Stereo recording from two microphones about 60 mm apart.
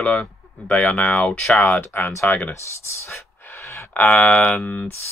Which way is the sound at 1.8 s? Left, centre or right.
Left.